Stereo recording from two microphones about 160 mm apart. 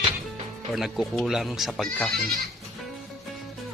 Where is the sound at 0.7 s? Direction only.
Centre (ahead or behind).